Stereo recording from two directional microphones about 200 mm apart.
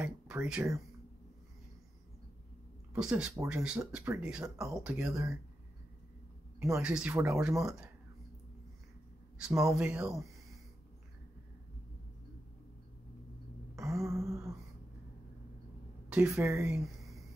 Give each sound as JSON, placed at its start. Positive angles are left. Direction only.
{"t": 0.0, "sound": "speech", "side_deg": -10}
{"t": 2.9, "sound": "speech", "side_deg": -5}
{"t": 6.8, "sound": "speech", "side_deg": -5}
{"t": 9.4, "sound": "speech", "side_deg": -10}
{"t": 13.7, "sound": "a sound", "side_deg": -15}
{"t": 16.1, "sound": "speech", "side_deg": -10}
{"t": 16.7, "sound": "a sound", "side_deg": 0}